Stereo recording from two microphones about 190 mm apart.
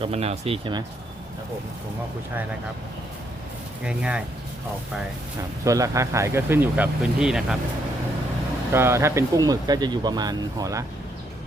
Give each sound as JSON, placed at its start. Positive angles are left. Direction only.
{"t": 0.0, "sound": "speech", "side_deg": -30}
{"t": 3.8, "sound": "speech", "side_deg": -5}
{"t": 5.6, "sound": "speech", "side_deg": -15}
{"t": 8.7, "sound": "speech", "side_deg": -15}